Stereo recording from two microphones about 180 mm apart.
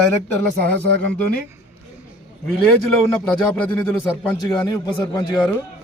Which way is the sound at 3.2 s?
10° left (ahead or behind).